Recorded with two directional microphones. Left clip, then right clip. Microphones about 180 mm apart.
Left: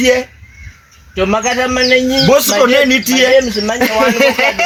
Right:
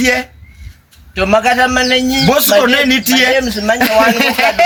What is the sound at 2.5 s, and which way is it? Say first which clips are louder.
Speech: left 1 dB; 30° right (ahead or behind).